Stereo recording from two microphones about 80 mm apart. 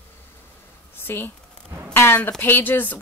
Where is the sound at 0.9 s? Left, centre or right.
Left.